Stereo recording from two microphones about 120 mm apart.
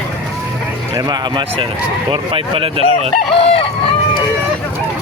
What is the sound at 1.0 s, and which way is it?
Speech, 35° right (ahead or behind).